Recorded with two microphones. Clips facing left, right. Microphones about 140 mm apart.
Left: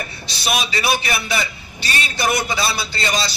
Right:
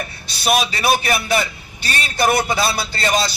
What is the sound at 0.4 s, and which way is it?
A man's voice, 45° right (ahead or behind).